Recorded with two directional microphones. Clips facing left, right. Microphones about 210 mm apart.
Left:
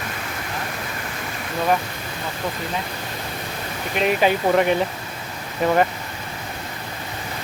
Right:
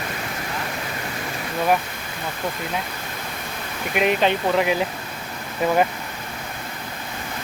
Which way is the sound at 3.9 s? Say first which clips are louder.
Left 1 dB; centre (ahead or behind).